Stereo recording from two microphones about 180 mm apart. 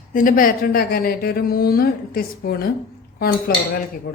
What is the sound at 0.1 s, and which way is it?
A woman's voice, 50° left (ahead or behind).